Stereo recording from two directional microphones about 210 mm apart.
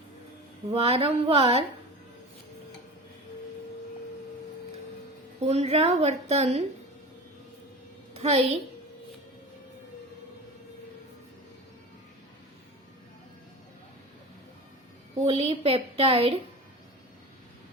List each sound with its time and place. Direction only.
0.7 s a woman's voice: 25° right (ahead or behind)
5.5 s a woman's voice: 30° right (ahead or behind)
8.1 s a woman's voice: 30° right (ahead or behind)
15.2 s a woman's voice: 30° right (ahead or behind)